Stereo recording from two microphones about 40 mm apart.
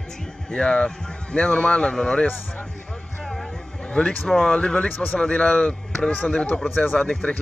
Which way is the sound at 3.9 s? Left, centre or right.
Centre.